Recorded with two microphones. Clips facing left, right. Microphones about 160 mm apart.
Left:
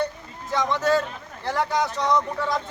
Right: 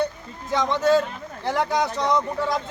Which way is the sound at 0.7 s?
15° right (ahead or behind).